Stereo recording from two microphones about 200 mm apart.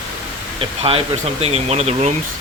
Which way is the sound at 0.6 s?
30° right (ahead or behind).